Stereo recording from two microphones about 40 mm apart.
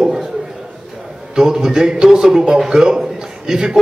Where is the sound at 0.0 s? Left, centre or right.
Centre.